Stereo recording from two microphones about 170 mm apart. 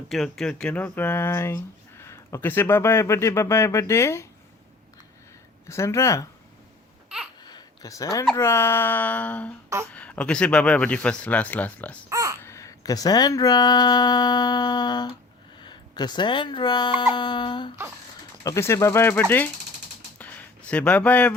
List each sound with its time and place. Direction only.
0.1 s speech: centre (ahead or behind)
5.6 s speech: 15° left (ahead or behind)
7.4 s a sound: 25° left (ahead or behind)
8.4 s speech: 15° left (ahead or behind)
9.6 s speech: 15° right (ahead or behind)
9.9 s speech: 10° left (ahead or behind)
12.0 s a sound: 20° right (ahead or behind)
12.4 s speech: 15° left (ahead or behind)
18.4 s speech: 15° left (ahead or behind)
20.1 s a sound: 10° left (ahead or behind)